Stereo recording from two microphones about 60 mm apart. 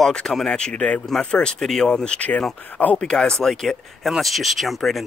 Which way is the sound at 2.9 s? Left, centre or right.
Centre.